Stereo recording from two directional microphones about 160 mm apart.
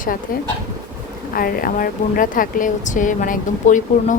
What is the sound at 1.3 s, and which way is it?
A woman's voice, 65° left (ahead or behind).